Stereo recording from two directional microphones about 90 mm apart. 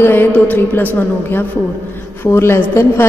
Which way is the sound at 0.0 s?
25° left (ahead or behind).